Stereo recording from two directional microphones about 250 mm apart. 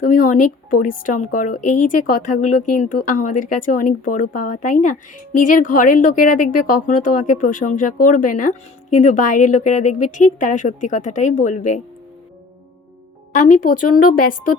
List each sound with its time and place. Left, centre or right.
0.0 s speech: left
13.3 s speech: left
13.7 s speech: left
14.1 s speech: left